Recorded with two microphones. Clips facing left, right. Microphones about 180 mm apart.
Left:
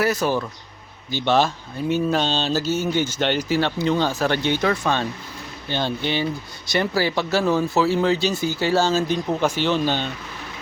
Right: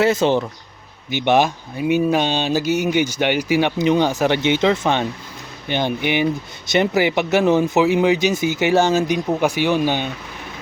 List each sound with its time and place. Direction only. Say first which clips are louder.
0.0 s speech: right 5 dB; 25° right (ahead or behind)